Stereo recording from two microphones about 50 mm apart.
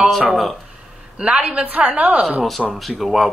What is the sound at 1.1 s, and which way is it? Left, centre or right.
Speech, right.